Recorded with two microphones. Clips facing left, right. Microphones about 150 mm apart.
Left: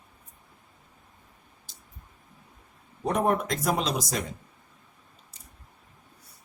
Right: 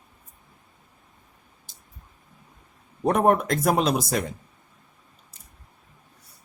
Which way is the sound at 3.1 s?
55° right (ahead or behind).